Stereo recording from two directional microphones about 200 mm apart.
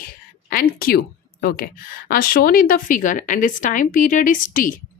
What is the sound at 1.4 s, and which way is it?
A woman's voice, 45° left (ahead or behind).